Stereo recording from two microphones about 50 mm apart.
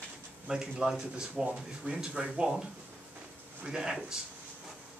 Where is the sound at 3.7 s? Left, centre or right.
Centre.